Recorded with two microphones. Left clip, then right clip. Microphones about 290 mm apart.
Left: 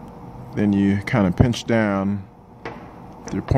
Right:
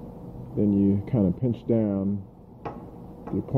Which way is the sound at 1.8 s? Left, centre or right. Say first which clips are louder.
Left 6 dB; left.